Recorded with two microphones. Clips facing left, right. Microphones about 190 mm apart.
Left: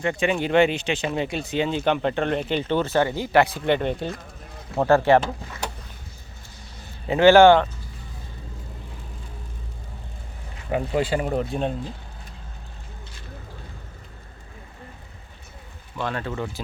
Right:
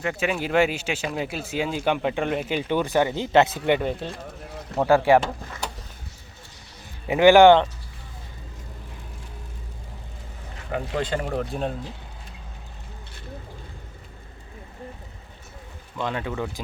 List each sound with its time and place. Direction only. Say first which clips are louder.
0.0 s speech: left 3 dB; 5° right (ahead or behind); by 3.8 s 20° right (ahead or behind)
3.8 s speech: left 2 dB; 5° right (ahead or behind)
7.1 s speech: even; 15° right (ahead or behind)
10.7 s speech: left 3 dB; 10° left (ahead or behind)
16.0 s speech: even; 15° right (ahead or behind)